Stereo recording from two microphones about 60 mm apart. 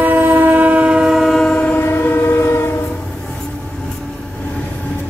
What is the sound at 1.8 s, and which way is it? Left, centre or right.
Train, left.